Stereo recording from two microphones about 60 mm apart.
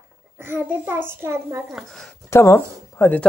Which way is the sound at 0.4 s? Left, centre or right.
Right.